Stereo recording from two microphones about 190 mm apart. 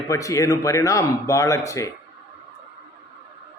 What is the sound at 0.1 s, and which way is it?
Speech, 15° left (ahead or behind).